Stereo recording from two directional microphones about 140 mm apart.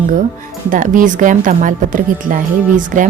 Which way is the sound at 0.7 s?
70° right (ahead or behind).